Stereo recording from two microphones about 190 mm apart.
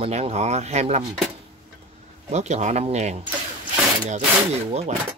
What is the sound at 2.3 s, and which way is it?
Speech, 35° right (ahead or behind).